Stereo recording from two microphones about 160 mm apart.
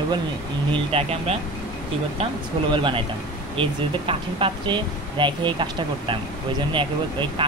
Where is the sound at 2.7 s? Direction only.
30° right (ahead or behind).